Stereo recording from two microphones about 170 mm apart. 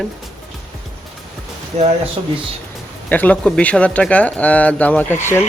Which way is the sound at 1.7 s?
35° right (ahead or behind).